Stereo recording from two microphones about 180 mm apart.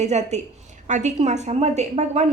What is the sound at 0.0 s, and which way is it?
A woman's voice, 40° right (ahead or behind).